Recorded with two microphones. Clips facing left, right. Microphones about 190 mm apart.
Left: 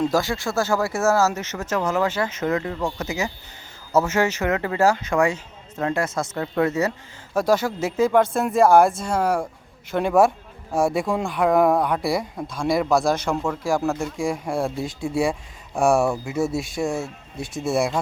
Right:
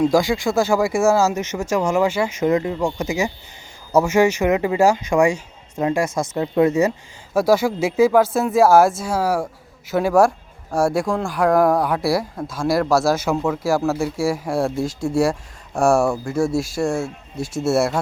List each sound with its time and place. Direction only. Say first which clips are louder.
0.0 s speech: right 5 dB; 15° right (ahead or behind)